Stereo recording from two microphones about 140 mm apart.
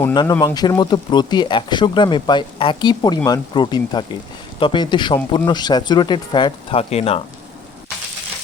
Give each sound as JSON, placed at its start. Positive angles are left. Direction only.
{"t": 0.1, "sound": "speech", "side_deg": 30}